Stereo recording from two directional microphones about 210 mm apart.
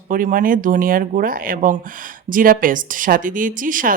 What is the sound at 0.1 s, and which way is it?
Speech, 40° right (ahead or behind).